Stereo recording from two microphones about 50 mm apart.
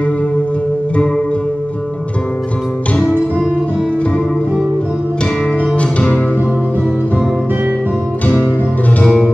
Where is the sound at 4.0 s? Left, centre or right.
Left.